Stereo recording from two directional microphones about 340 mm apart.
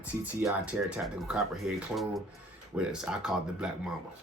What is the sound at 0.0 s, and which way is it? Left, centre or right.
Speech, centre.